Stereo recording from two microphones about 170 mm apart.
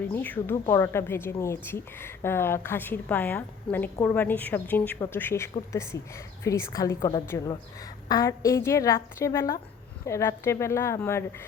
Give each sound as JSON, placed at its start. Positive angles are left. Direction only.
{"t": 0.1, "sound": "a woman's voice", "side_deg": 10}